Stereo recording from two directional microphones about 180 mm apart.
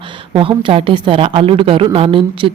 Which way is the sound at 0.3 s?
30° right (ahead or behind).